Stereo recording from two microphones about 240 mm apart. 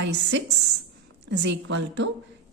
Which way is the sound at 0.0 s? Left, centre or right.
Right.